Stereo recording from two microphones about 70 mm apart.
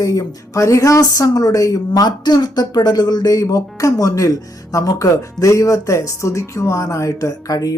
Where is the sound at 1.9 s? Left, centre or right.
Left.